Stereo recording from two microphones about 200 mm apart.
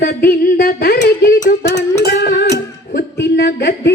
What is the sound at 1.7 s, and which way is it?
Music, 55° left (ahead or behind).